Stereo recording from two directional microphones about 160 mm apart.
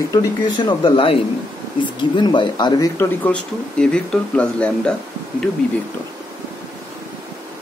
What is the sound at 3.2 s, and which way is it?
Speech, 5° left (ahead or behind).